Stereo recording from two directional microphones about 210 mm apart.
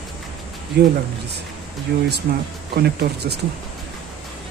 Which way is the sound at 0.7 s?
50° right (ahead or behind).